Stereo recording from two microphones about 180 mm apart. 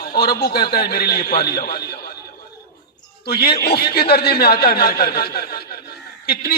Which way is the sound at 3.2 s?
60° left (ahead or behind).